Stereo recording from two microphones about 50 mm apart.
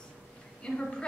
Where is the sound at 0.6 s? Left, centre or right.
Centre.